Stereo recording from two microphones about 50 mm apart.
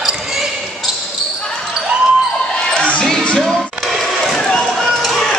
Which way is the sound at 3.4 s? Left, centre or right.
Centre.